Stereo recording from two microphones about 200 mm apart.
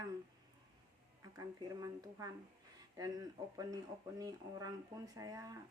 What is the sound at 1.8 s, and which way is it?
Speech, 15° right (ahead or behind).